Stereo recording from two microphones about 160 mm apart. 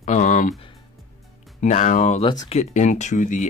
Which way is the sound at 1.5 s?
50° left (ahead or behind).